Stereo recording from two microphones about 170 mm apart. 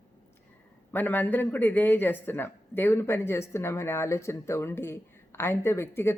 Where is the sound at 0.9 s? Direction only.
10° left (ahead or behind).